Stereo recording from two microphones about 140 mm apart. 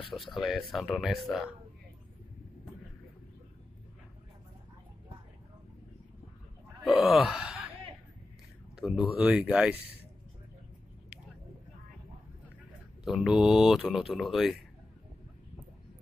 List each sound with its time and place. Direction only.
0.1 s speech: centre (ahead or behind)
6.8 s gasp: centre (ahead or behind)
8.7 s speech: 5° right (ahead or behind)
13.0 s speech: 5° right (ahead or behind)